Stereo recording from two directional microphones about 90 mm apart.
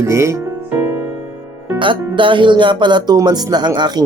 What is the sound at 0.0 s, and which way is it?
Speech, 35° right (ahead or behind).